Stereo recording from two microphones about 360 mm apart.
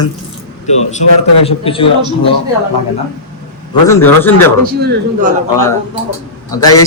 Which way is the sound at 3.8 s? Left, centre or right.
Centre.